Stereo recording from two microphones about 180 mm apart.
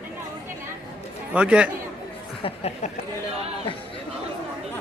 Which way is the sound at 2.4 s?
35° left (ahead or behind).